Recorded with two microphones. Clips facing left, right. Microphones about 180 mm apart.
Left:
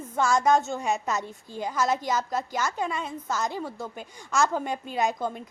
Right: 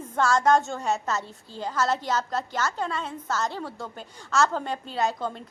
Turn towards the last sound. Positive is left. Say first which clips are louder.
# even
turn(degrees=15)  # may be behind; listen again after turning